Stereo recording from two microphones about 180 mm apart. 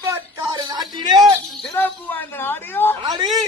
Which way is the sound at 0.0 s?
15° right (ahead or behind).